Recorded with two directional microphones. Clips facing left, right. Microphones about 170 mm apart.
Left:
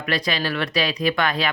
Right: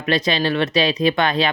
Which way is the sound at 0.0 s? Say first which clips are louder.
Right 5 dB; 25° right (ahead or behind).